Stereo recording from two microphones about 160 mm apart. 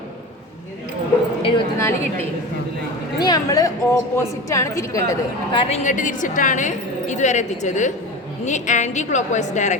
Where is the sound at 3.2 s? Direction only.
25° left (ahead or behind).